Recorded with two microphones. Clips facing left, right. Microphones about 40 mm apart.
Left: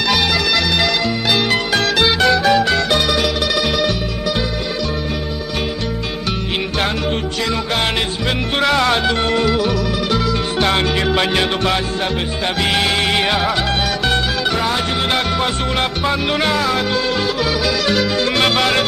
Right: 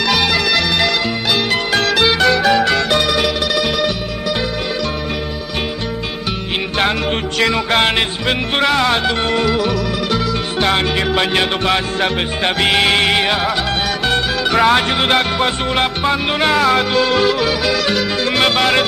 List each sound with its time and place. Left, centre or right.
7.3 s music: right
7.8 s music: right
8.6 s music: centre
10.6 s music: centre
12.5 s music: right
13.1 s music: centre
14.5 s music: right
15.0 s music: right
16.7 s music: right
18.0 s music: centre